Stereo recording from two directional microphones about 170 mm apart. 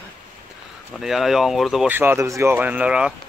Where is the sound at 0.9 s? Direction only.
Centre (ahead or behind).